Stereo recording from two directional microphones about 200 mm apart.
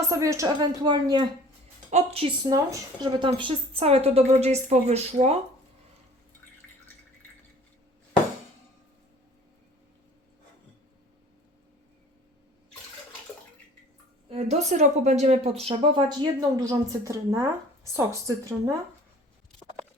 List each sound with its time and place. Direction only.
0.1 s speech: 15° right (ahead or behind)
1.9 s a woman's voice: 35° right (ahead or behind)
2.5 s a woman's voice: 20° right (ahead or behind)
14.3 s a woman's voice: 35° right (ahead or behind); by 18.7 s 15° right (ahead or behind)